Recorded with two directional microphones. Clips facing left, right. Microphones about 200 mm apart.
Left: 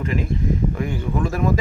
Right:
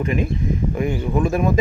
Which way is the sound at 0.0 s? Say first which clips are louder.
Right 2 dB; 20° right (ahead or behind).